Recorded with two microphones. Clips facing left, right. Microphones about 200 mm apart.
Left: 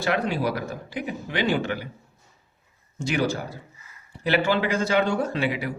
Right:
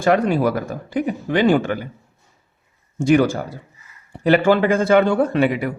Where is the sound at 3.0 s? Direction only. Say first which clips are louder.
Right 9 dB; 55° right (ahead or behind).